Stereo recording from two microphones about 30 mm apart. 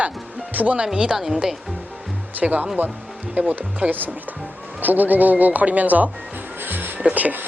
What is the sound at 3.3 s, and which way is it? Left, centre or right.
Speech, right.